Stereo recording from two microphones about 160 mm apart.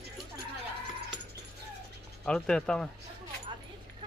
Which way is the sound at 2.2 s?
5° left (ahead or behind).